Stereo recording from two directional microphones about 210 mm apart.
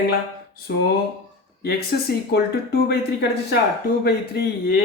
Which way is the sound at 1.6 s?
50° left (ahead or behind).